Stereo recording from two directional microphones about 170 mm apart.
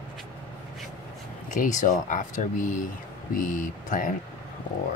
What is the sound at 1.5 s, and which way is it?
Speech, 50° left (ahead or behind).